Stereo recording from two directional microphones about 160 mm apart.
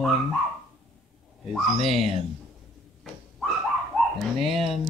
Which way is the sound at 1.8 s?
40° right (ahead or behind).